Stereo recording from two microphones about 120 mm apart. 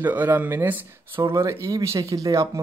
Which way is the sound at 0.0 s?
15° right (ahead or behind).